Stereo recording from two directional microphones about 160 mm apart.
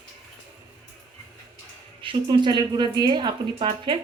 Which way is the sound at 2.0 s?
30° right (ahead or behind).